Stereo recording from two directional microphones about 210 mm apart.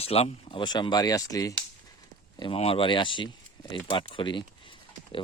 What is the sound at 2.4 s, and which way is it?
Speech, 25° left (ahead or behind).